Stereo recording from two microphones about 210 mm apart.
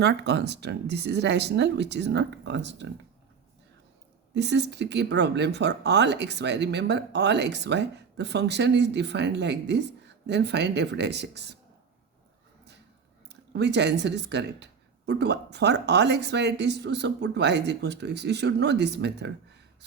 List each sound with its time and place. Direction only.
0.0 s speech: 55° right (ahead or behind)
4.4 s speech: 55° right (ahead or behind)
13.2 s speech: 55° right (ahead or behind)